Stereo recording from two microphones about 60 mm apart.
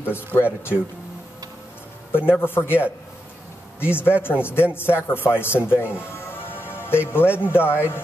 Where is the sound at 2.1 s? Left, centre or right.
Left.